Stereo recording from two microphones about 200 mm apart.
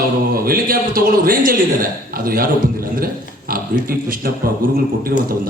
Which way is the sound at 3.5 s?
45° right (ahead or behind).